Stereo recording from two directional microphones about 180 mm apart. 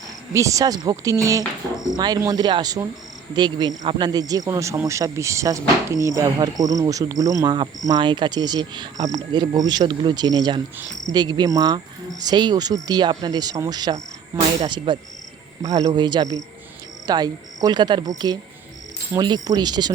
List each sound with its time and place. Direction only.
0.3 s a man's voice: 20° right (ahead or behind)